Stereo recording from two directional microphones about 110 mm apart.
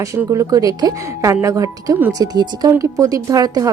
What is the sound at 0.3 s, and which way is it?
A woman's voice, 30° right (ahead or behind).